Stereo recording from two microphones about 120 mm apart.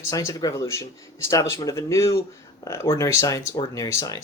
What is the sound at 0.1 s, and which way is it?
Speech, 25° left (ahead or behind).